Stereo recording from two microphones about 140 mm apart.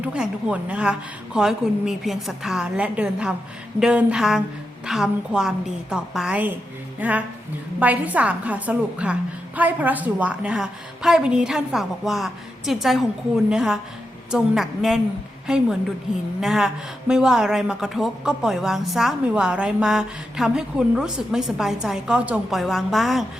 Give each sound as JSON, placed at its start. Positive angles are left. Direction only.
{"t": 0.0, "sound": "a woman's voice", "side_deg": -5}